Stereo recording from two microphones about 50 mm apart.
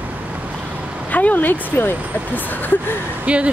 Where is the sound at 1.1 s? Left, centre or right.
Left.